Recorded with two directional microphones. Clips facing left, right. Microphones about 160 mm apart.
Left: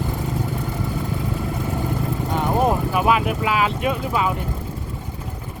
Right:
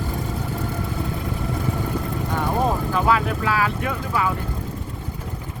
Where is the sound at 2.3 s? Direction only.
20° left (ahead or behind).